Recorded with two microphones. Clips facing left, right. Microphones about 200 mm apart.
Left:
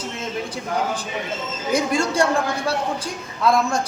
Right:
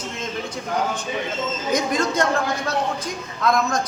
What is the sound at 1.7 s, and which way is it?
A man's voice, 30° left (ahead or behind).